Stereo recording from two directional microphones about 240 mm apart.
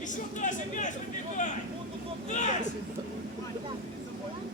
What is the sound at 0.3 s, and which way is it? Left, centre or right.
Speech, left.